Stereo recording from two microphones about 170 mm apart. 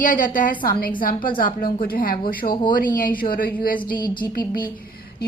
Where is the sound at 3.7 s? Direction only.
25° left (ahead or behind).